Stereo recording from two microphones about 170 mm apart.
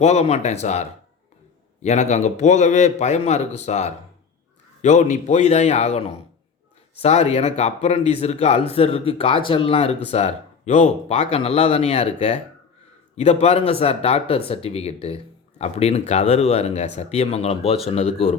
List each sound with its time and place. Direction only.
0.0 s a man's voice: 40° left (ahead or behind)